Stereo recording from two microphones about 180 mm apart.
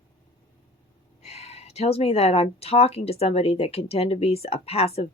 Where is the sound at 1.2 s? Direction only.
35° left (ahead or behind).